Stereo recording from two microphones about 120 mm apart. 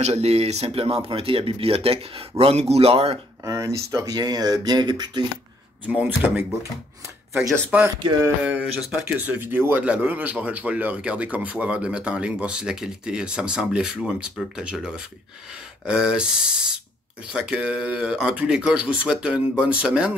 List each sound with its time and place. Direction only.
0.0 s speech: 65° right (ahead or behind)
3.4 s speech: 25° right (ahead or behind)
5.9 s speech: 15° right (ahead or behind)
7.7 s speech: 10° right (ahead or behind)